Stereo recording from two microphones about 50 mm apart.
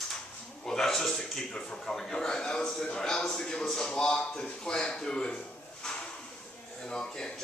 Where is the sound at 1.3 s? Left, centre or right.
Centre.